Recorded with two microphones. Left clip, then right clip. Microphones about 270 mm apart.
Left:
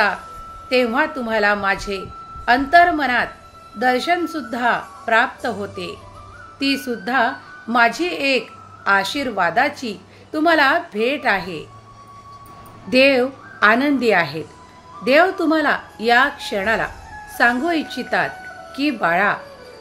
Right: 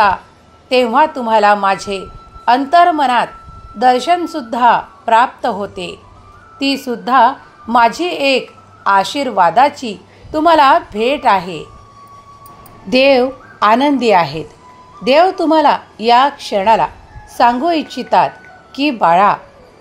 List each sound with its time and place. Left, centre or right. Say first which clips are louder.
0.7 s a woman's voice: right 7 dB; centre
12.9 s a woman's voice: right 4 dB; centre